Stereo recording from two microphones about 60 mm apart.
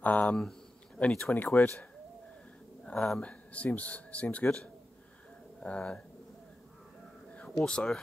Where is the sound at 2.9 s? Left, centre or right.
Centre.